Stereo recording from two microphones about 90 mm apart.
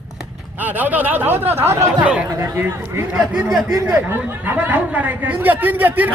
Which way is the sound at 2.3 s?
30° right (ahead or behind).